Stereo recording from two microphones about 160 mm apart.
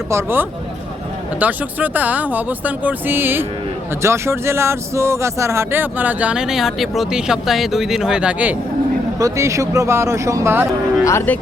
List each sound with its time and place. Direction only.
0.1 s speech: 15° right (ahead or behind)
9.1 s speech: 20° right (ahead or behind)
11.0 s speech: 15° left (ahead or behind)